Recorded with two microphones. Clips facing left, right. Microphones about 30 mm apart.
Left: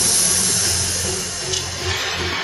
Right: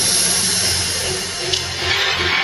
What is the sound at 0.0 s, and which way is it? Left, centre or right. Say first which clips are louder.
Music: right 2 dB; right.